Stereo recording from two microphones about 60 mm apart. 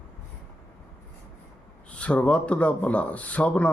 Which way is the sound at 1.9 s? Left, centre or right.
Left.